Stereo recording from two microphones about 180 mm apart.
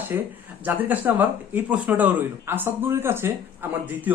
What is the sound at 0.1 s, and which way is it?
Speech, 10° right (ahead or behind).